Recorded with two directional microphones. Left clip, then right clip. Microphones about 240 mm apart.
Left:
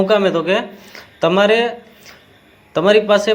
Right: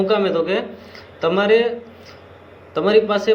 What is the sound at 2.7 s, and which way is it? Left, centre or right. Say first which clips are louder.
Speech: left 4 dB; left.